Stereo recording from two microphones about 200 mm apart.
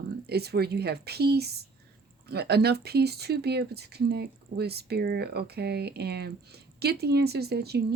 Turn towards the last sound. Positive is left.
turn(degrees=-55)  # may be behind; listen again after turning